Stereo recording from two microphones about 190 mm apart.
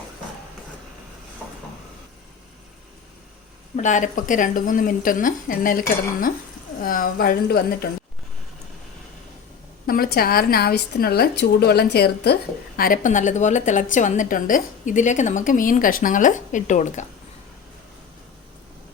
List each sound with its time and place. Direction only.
3.8 s a woman's voice: 40° left (ahead or behind)
9.8 s a woman's voice: 50° left (ahead or behind)